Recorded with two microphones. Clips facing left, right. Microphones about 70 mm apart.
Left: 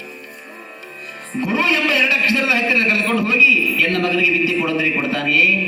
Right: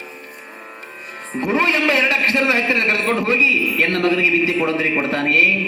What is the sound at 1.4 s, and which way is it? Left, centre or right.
A man's voice, right.